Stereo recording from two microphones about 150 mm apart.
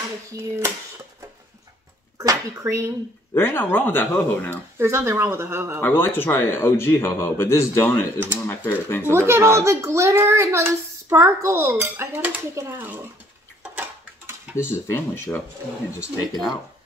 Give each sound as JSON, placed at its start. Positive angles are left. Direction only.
{"t": 0.3, "sound": "a child's voice", "side_deg": -15}
{"t": 2.1, "sound": "speech", "side_deg": -20}
{"t": 3.3, "sound": "speech", "side_deg": 15}
{"t": 4.7, "sound": "a child's voice", "side_deg": -20}
{"t": 5.8, "sound": "speech", "side_deg": 15}
{"t": 9.1, "sound": "a child's voice", "side_deg": -15}
{"t": 13.7, "sound": "a sound", "side_deg": -10}
{"t": 14.6, "sound": "speech", "side_deg": 15}